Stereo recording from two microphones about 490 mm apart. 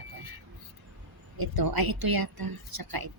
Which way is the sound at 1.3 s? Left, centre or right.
Right.